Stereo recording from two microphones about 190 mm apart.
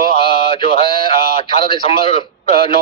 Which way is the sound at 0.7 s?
25° left (ahead or behind).